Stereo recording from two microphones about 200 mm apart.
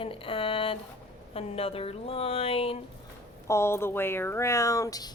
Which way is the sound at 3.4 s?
15° left (ahead or behind).